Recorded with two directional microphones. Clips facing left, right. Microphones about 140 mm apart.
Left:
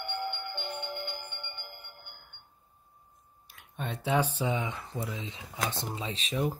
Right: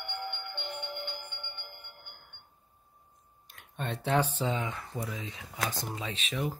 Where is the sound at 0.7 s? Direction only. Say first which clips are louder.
Even; 10° left (ahead or behind).